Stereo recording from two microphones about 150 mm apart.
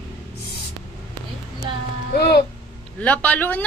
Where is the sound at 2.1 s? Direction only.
90° left.